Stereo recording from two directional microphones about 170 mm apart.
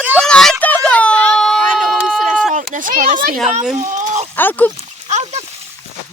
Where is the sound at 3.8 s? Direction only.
45° right (ahead or behind).